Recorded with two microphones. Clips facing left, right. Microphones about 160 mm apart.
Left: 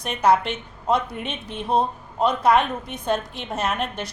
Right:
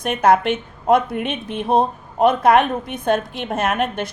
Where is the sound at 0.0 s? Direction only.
50° right (ahead or behind).